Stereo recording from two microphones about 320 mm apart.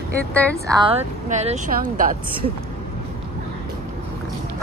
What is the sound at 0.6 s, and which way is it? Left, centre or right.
Speech, centre.